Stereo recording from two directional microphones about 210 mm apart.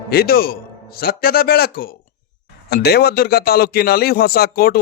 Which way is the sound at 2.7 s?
50° left (ahead or behind).